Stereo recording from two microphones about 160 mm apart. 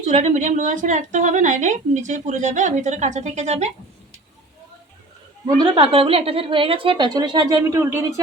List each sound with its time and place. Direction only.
0.0 s a woman's voice: 45° right (ahead or behind)
5.5 s a woman's voice: 30° right (ahead or behind)